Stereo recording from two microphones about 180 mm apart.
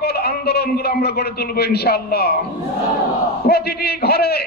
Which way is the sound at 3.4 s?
60° left (ahead or behind).